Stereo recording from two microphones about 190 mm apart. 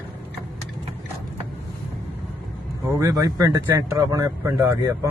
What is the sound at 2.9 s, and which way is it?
Speech, 15° right (ahead or behind).